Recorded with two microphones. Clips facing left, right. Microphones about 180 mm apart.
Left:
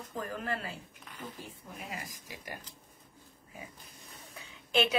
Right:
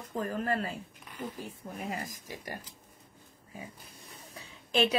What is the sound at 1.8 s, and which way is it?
Speech, 40° right (ahead or behind).